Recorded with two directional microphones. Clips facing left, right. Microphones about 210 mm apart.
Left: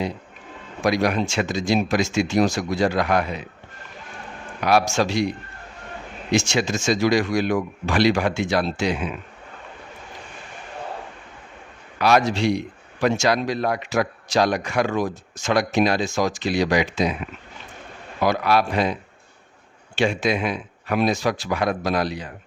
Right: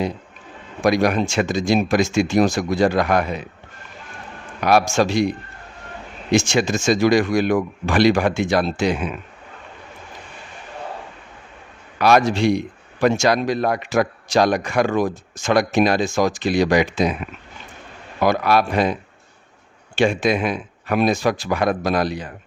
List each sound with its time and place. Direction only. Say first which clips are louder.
0.9 s a man's voice: right 3 dB; 50° right (ahead or behind)
4.6 s a man's voice: right 3 dB; 50° right (ahead or behind)
6.3 s a man's voice: right 3 dB; 50° right (ahead or behind)
11.9 s a man's voice: right 3 dB; 50° right (ahead or behind)
18.2 s a man's voice: right 2 dB; 50° right (ahead or behind)
20.0 s a man's voice: right 3 dB; 50° right (ahead or behind)